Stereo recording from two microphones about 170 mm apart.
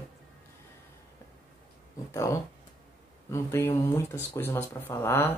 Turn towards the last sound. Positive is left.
turn(degrees=15)  # may be behind; listen again after turning